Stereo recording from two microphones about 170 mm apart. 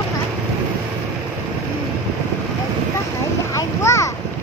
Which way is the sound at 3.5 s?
15° left (ahead or behind).